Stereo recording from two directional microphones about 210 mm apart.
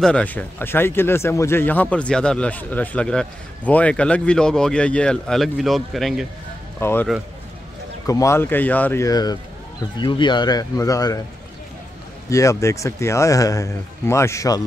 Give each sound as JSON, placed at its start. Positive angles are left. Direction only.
{"t": 0.0, "sound": "speech", "side_deg": 5}
{"t": 6.8, "sound": "speech", "side_deg": 10}
{"t": 8.1, "sound": "speech", "side_deg": 15}
{"t": 12.3, "sound": "speech", "side_deg": 15}